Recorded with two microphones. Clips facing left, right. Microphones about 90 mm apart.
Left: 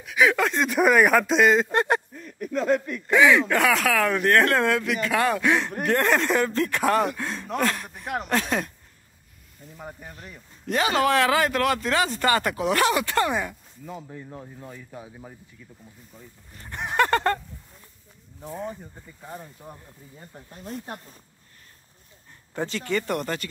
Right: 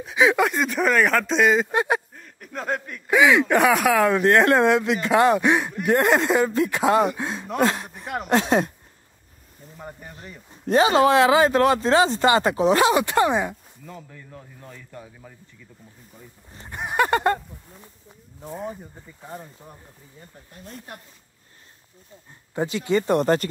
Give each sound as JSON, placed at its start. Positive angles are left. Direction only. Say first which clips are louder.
{"t": 0.0, "sound": "speech", "louder": "right 2 dB", "side_deg": -25}
{"t": 0.5, "sound": "speech", "louder": "left 1 dB", "side_deg": 0}
{"t": 3.1, "sound": "speech", "louder": "right 1 dB", "side_deg": -15}
{"t": 7.9, "sound": "speech", "louder": "even", "side_deg": 0}
{"t": 8.3, "sound": "speech", "louder": "right 7 dB", "side_deg": -25}
{"t": 9.8, "sound": "speech", "louder": "right 1 dB", "side_deg": 0}
{"t": 10.5, "sound": "speech", "louder": "right 6 dB", "side_deg": -30}
{"t": 13.8, "sound": "speech", "louder": "left 4 dB", "side_deg": 20}
{"t": 16.5, "sound": "speech", "louder": "right 1 dB", "side_deg": -20}
{"t": 16.8, "sound": "speech", "louder": "right 1 dB", "side_deg": -10}
{"t": 18.5, "sound": "speech", "louder": "right 1 dB", "side_deg": -5}
{"t": 22.5, "sound": "speech", "louder": "right 5 dB", "side_deg": -15}
{"t": 23.1, "sound": "speech", "louder": "right 9 dB", "side_deg": -40}